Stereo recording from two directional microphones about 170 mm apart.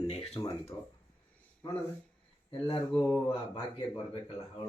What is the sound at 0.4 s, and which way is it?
Speech, 15° left (ahead or behind).